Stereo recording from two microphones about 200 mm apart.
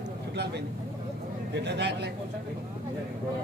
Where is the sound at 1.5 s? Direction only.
60° right (ahead or behind).